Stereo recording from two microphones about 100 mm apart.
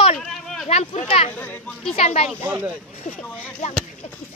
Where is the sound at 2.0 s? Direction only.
90° left.